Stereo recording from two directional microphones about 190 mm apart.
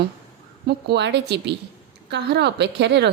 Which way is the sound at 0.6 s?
60° right (ahead or behind).